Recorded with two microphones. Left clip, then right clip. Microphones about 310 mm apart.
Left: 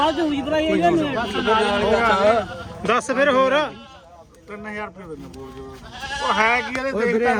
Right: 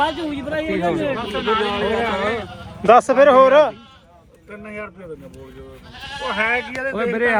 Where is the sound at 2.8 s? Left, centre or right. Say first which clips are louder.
Right 7 dB; centre.